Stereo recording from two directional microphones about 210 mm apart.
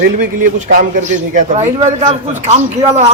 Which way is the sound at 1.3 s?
35° right (ahead or behind).